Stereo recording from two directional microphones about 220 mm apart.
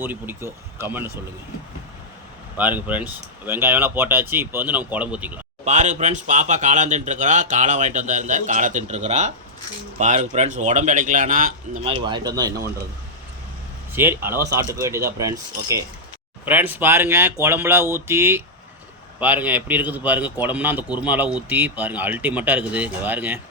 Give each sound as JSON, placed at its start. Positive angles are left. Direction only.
{"t": 0.0, "sound": "speech", "side_deg": -10}
{"t": 2.6, "sound": "speech", "side_deg": -5}
{"t": 5.6, "sound": "speech", "side_deg": -35}
{"t": 11.9, "sound": "speech", "side_deg": -20}
{"t": 13.9, "sound": "speech", "side_deg": -10}